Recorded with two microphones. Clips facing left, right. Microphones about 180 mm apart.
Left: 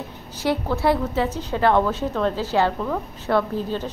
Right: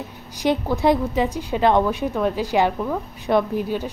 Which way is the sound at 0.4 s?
15° right (ahead or behind).